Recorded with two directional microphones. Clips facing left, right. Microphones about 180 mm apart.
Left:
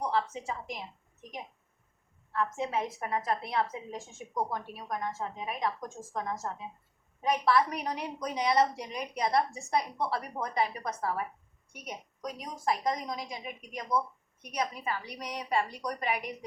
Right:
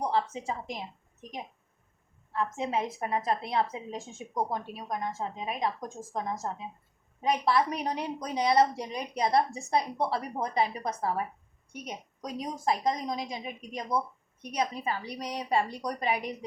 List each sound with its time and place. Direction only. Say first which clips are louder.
0.0 s a woman's voice: right 2 dB; 25° right (ahead or behind)
2.3 s a woman's voice: right 1 dB; 20° right (ahead or behind)